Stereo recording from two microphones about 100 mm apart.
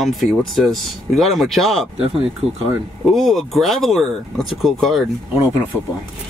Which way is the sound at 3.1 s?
Centre (ahead or behind).